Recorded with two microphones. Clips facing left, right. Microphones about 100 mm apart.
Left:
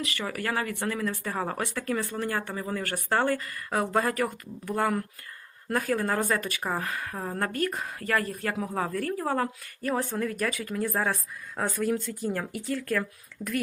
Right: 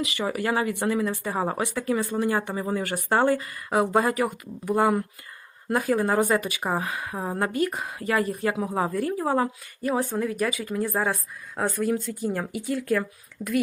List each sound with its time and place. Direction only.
0.0 s speech: 15° right (ahead or behind)